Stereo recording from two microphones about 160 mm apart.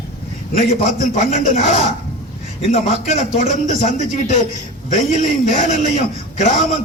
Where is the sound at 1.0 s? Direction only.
45° left (ahead or behind).